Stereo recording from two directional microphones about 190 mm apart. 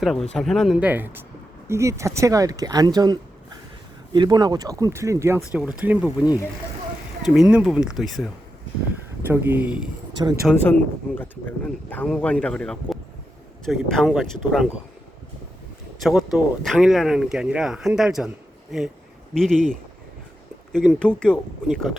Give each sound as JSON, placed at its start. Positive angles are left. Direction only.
{"t": 0.0, "sound": "speech", "side_deg": 0}
{"t": 5.5, "sound": "speech", "side_deg": -5}
{"t": 7.4, "sound": "speech", "side_deg": -5}
{"t": 9.2, "sound": "speech", "side_deg": -10}
{"t": 10.2, "sound": "speech", "side_deg": -20}
{"t": 10.6, "sound": "speech", "side_deg": 10}
{"t": 16.0, "sound": "speech", "side_deg": 0}
{"t": 19.3, "sound": "speech", "side_deg": 0}